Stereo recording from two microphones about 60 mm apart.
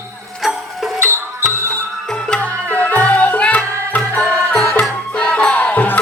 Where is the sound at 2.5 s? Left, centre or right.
Right.